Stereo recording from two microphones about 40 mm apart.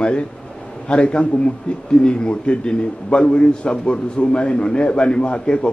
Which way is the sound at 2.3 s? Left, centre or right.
Left.